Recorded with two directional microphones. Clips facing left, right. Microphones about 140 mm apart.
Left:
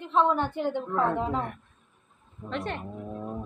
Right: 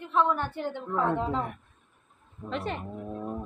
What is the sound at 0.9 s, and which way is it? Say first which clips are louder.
Speech: right 2 dB; centre (ahead or behind).